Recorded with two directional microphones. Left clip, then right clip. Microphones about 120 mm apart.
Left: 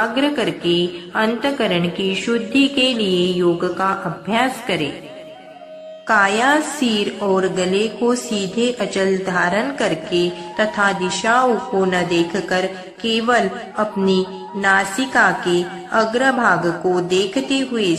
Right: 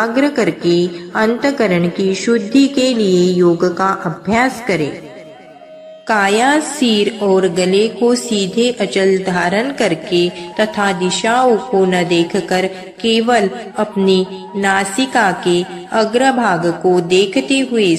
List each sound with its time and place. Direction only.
0.0 s a woman's voice: 35° right (ahead or behind)
6.0 s a woman's voice: 35° right (ahead or behind)